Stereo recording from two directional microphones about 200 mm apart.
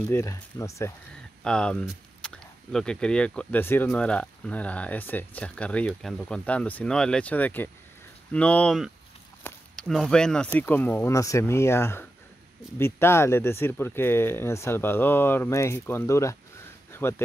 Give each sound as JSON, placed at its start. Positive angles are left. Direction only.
{"t": 0.1, "sound": "speech", "side_deg": 15}
{"t": 1.4, "sound": "speech", "side_deg": 5}